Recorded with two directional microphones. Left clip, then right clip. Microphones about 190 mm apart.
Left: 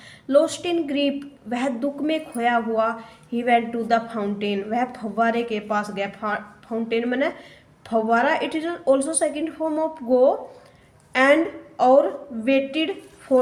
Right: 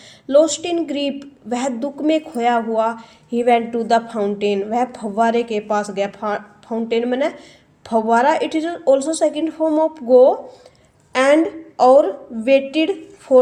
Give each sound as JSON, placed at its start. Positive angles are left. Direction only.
{"t": 0.3, "sound": "a woman's voice", "side_deg": -25}